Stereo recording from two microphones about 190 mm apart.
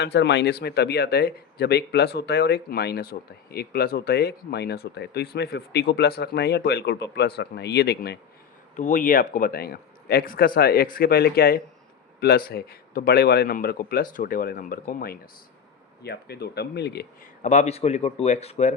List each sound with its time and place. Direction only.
0.0 s speech: 65° left (ahead or behind)
8.7 s speech: 40° left (ahead or behind); by 17.1 s 60° left (ahead or behind)
17.4 s speech: 40° left (ahead or behind)